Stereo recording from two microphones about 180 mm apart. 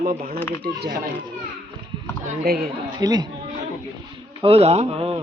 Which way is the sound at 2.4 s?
60° right (ahead or behind).